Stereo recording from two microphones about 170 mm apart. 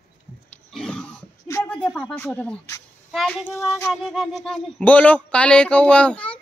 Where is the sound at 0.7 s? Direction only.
5° left (ahead or behind).